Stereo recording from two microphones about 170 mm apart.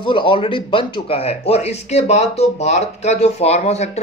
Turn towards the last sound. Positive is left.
turn(degrees=40)  # may be behind; listen again after turning